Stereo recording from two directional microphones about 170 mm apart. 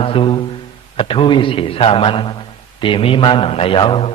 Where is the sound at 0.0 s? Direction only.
30° left (ahead or behind).